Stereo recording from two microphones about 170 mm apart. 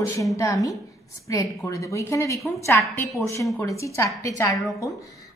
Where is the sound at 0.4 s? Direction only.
20° left (ahead or behind).